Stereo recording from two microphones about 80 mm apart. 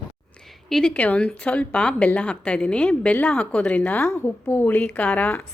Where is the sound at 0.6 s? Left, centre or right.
Centre.